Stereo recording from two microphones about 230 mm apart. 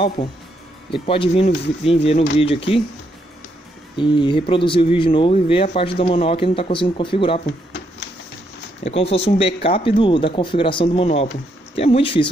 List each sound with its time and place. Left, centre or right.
0.9 s speech: left
3.9 s speech: left
8.8 s speech: left